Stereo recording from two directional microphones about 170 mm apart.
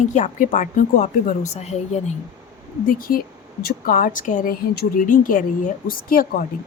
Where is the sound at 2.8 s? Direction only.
55° left (ahead or behind).